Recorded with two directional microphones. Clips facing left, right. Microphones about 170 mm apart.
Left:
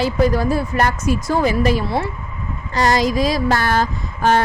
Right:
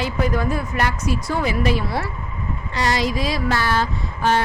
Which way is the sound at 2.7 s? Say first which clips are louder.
Left 5 dB; 45° left (ahead or behind).